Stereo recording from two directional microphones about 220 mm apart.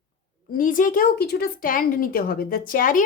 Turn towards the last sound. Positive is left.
turn(degrees=35)  # may be behind; listen again after turning